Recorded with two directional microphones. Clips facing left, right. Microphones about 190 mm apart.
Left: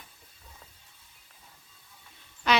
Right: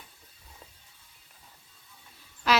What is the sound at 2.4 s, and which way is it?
Quack, centre (ahead or behind).